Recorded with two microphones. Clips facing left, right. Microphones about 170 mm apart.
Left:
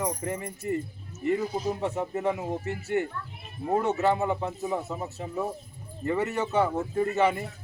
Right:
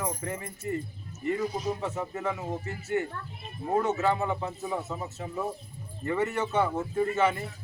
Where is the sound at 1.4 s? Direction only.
30° left (ahead or behind).